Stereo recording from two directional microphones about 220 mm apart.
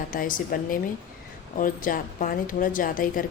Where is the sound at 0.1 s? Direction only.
40° left (ahead or behind).